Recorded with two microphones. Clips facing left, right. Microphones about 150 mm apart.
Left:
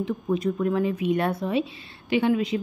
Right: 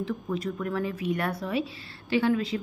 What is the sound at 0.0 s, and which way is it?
A woman's voice, 20° left (ahead or behind).